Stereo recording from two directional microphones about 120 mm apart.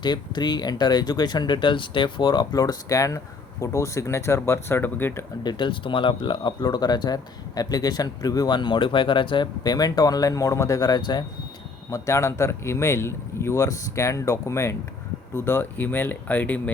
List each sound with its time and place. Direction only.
0.0 s speech: 40° left (ahead or behind); by 5.2 s 20° left (ahead or behind)
5.4 s speech: 40° left (ahead or behind)
11.9 s speech: 25° left (ahead or behind)